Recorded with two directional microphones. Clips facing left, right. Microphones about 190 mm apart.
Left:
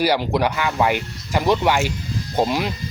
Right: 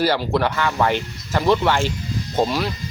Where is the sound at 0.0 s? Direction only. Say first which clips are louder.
Even; 15° left (ahead or behind).